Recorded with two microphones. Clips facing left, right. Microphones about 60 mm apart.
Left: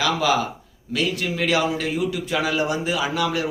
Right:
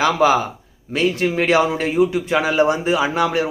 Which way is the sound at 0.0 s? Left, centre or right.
Right.